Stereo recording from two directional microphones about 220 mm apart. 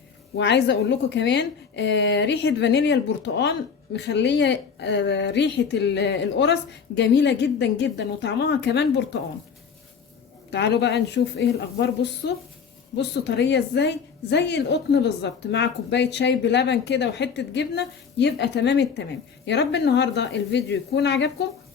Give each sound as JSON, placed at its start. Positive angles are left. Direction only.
{"t": 0.3, "sound": "a woman's voice", "side_deg": 50}
{"t": 10.5, "sound": "a woman's voice", "side_deg": 50}